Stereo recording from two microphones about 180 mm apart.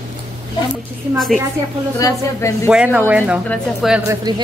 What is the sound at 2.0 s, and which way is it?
Speech, 15° left (ahead or behind).